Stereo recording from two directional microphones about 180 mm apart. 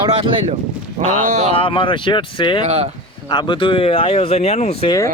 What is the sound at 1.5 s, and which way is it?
Speech, 30° left (ahead or behind).